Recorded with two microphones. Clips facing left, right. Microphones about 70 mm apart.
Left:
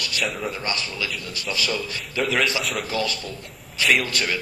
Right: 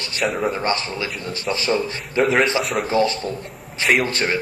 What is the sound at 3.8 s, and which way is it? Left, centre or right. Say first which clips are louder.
Speech: right 3 dB; right.